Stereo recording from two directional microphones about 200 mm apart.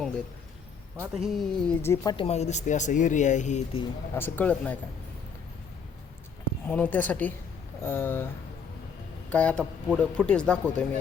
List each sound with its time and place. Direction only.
1.1 s speech: centre (ahead or behind)
2.1 s speech: 30° left (ahead or behind)
4.1 s speech: 10° left (ahead or behind)
6.7 s speech: 10° left (ahead or behind)
9.3 s speech: 5° left (ahead or behind)